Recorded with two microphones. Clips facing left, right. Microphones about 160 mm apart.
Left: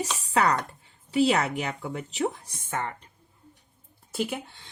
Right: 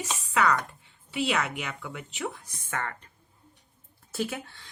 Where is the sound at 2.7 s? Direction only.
20° left (ahead or behind).